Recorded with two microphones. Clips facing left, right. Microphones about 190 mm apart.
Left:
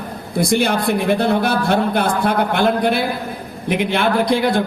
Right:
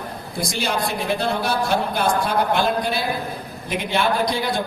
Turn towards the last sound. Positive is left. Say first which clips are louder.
# left 6 dB
turn(degrees=55)  # may be behind; listen again after turning